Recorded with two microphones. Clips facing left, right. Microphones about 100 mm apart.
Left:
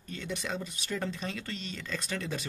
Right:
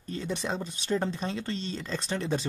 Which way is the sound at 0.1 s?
30° right (ahead or behind).